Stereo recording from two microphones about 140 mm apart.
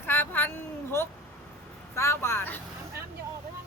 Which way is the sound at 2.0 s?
20° left (ahead or behind).